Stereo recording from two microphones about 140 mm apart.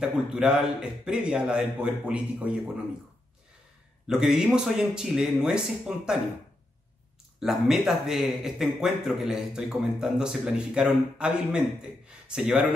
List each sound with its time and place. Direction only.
0.0 s speech: 5° right (ahead or behind)
4.1 s speech: 5° right (ahead or behind)
7.3 s speech: 5° right (ahead or behind)